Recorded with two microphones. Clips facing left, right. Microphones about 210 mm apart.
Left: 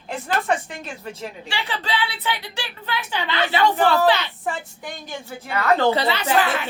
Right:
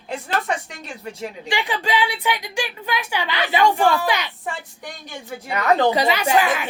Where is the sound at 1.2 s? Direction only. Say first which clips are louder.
Right 8 dB; 15° right (ahead or behind).